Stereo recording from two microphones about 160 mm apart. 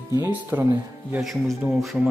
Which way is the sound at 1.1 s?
5° right (ahead or behind).